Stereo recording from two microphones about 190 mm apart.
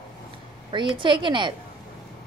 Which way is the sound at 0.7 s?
25° right (ahead or behind).